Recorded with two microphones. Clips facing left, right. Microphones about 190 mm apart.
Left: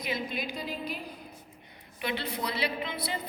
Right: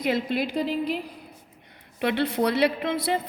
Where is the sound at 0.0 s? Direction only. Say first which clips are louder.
Right 9 dB; 75° right (ahead or behind).